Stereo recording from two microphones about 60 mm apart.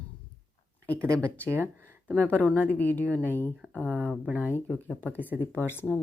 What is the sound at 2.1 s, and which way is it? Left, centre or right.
Speech, left.